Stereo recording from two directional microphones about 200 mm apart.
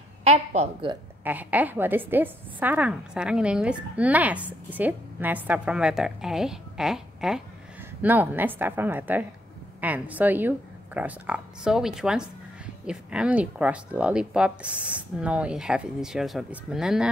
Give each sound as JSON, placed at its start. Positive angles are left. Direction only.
{"t": 0.2, "sound": "a woman's voice", "side_deg": -35}
{"t": 1.2, "sound": "a woman's voice", "side_deg": -10}